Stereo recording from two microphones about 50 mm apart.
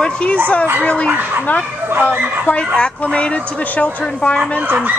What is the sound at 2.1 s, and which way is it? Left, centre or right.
Speech, right.